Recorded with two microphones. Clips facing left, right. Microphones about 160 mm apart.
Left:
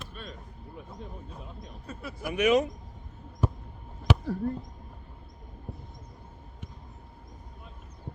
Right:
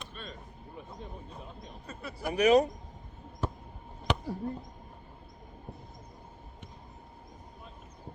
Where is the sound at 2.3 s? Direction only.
35° right (ahead or behind).